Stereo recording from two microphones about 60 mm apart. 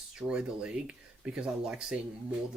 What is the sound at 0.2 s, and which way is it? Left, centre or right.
Speech, centre.